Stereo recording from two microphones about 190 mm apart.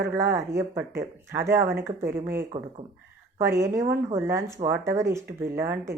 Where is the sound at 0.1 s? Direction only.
15° right (ahead or behind).